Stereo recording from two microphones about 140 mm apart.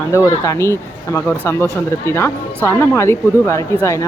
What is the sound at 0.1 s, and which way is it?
Speech, 20° left (ahead or behind).